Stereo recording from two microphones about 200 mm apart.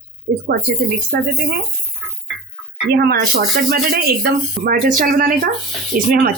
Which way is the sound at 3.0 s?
50° right (ahead or behind).